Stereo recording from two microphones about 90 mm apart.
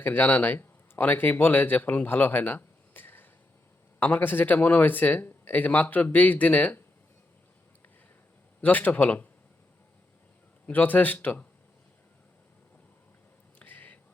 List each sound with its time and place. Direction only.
0.0 s speech: 20° left (ahead or behind)
8.6 s speech: 20° left (ahead or behind)
10.7 s speech: 20° left (ahead or behind)
13.6 s a sound: 20° left (ahead or behind)